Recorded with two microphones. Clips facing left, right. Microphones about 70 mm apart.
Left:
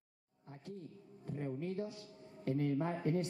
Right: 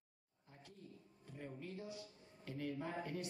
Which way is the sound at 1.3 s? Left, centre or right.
Left.